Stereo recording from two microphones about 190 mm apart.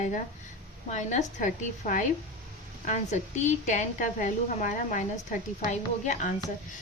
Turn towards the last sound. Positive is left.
turn(degrees=40)  # may be behind; listen again after turning